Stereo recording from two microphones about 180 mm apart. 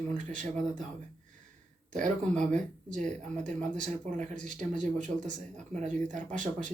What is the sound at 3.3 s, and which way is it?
Speech, 45° right (ahead or behind).